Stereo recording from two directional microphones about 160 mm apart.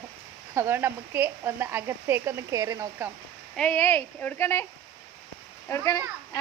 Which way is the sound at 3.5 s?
10° left (ahead or behind).